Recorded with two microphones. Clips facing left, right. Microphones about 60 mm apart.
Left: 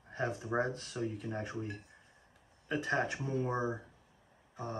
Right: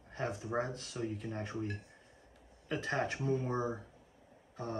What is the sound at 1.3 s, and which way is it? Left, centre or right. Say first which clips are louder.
Speech: even; centre.